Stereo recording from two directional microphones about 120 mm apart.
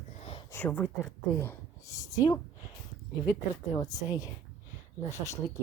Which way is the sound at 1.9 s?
30° left (ahead or behind).